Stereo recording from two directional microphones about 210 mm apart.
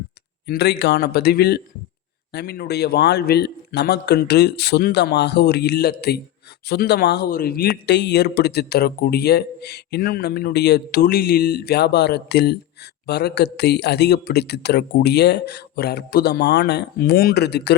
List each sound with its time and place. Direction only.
0.4 s speech: 50° left (ahead or behind)